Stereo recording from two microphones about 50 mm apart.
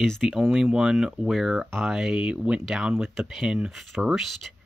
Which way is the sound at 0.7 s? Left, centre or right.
Centre.